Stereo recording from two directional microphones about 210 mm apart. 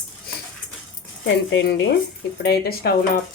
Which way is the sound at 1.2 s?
55° left (ahead or behind).